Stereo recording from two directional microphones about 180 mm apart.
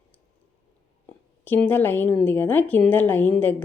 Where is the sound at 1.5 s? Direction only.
10° left (ahead or behind).